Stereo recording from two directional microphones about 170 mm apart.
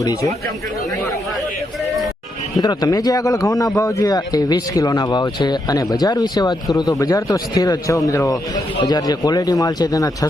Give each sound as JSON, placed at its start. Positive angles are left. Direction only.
{"t": 0.0, "sound": "speech", "side_deg": 20}
{"t": 2.6, "sound": "speech", "side_deg": 20}